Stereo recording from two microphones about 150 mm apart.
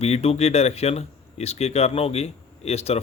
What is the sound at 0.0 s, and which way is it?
A man's voice, 45° left (ahead or behind).